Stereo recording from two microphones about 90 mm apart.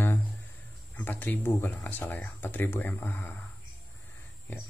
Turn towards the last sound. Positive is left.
turn(degrees=25)  # may be behind; listen again after turning